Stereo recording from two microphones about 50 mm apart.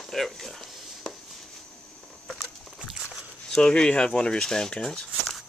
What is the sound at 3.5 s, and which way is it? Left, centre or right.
Speech, centre.